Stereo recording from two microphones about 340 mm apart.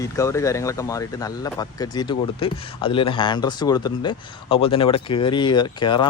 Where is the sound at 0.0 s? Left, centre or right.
Centre.